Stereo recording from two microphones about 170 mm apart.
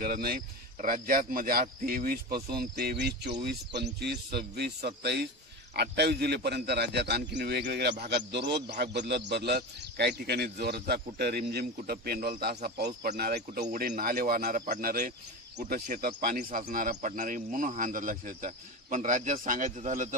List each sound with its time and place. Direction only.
0.0 s speech: 60° right (ahead or behind)
8.3 s speech: 85° right; by 20.2 s 45° right (ahead or behind)